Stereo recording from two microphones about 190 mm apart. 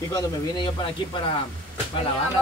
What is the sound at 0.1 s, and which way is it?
Speech, 25° left (ahead or behind).